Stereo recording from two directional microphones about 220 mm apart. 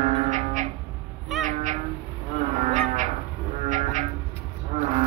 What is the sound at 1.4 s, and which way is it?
Meow, 35° right (ahead or behind).